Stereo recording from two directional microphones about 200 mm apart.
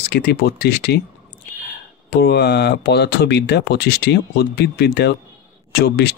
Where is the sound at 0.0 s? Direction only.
55° left (ahead or behind).